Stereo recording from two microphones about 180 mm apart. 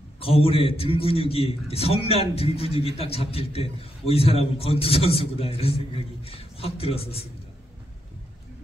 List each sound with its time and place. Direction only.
0.2 s a man's voice: 30° left (ahead or behind)